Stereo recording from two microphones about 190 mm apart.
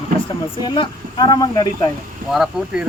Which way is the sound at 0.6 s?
25° left (ahead or behind).